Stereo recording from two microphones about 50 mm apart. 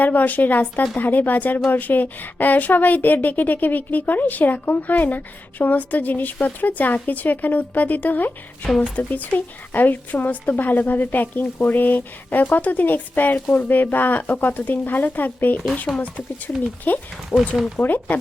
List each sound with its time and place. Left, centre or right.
0.0 s a woman's voice: left
15.9 s speech: centre
16.9 s a woman's voice: left
17.3 s speech: centre
17.7 s a woman's voice: left